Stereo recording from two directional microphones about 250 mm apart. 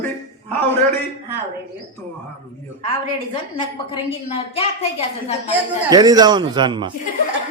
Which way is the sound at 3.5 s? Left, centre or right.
Left.